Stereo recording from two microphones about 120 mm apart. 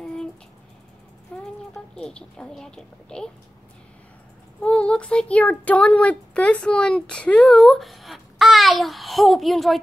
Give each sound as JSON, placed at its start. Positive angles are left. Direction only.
{"t": 1.3, "sound": "a sound", "side_deg": 10}
{"t": 2.0, "sound": "speech", "side_deg": 5}
{"t": 4.6, "sound": "speech", "side_deg": 10}